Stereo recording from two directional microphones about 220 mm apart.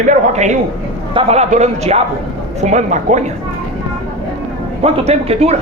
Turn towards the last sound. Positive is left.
turn(degrees=-30)  # may be behind; listen again after turning